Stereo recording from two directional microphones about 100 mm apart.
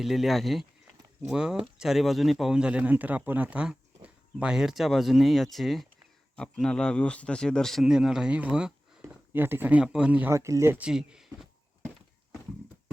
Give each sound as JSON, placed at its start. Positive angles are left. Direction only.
{"t": 0.0, "sound": "speech", "side_deg": 0}
{"t": 9.0, "sound": "speech", "side_deg": -20}
{"t": 10.2, "sound": "speech", "side_deg": -30}
{"t": 10.8, "sound": "speech", "side_deg": -5}